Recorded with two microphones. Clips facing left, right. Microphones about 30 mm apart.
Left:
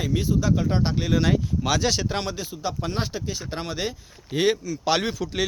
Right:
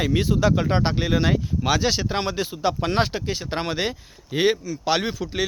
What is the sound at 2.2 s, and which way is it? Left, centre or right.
Speech, right.